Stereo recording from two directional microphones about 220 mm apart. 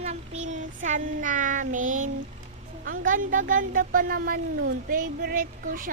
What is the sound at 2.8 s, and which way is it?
Speech, 40° right (ahead or behind).